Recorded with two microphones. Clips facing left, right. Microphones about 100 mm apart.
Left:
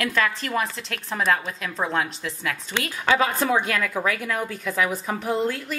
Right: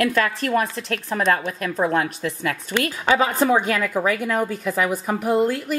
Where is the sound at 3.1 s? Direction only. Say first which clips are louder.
Right 3 dB; 15° right (ahead or behind).